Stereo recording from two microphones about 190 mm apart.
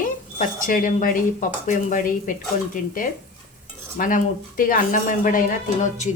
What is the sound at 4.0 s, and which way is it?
Speech, 45° left (ahead or behind).